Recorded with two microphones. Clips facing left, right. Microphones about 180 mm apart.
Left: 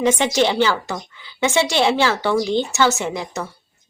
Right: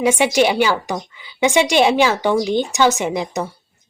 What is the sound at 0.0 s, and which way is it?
Speech, 10° right (ahead or behind).